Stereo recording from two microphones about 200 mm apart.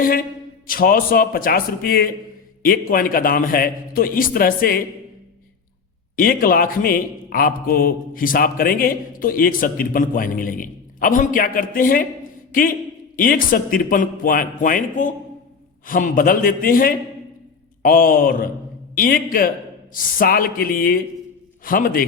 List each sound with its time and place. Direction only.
0.7 s a man's voice: 45° left (ahead or behind)
6.1 s a man's voice: 45° left (ahead or behind)
13.1 s a man's voice: 45° left (ahead or behind)